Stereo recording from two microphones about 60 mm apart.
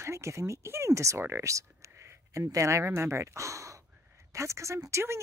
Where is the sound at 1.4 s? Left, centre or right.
Right.